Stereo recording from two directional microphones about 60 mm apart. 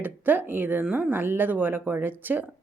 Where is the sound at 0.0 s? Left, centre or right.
Right.